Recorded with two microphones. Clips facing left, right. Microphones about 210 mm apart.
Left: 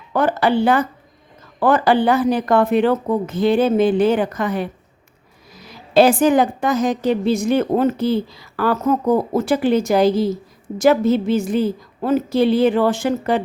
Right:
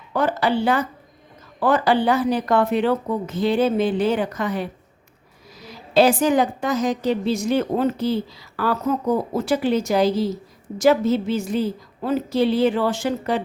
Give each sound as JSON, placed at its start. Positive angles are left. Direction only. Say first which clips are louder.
{"t": 0.1, "sound": "speech", "louder": "left 3 dB", "side_deg": 55}
{"t": 5.9, "sound": "a woman's voice", "louder": "left 3 dB", "side_deg": 55}